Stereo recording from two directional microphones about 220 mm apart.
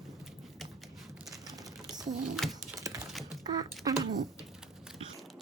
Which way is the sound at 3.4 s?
20° right (ahead or behind).